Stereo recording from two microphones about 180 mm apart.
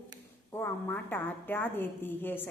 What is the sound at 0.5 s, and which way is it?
A woman's voice, 10° left (ahead or behind).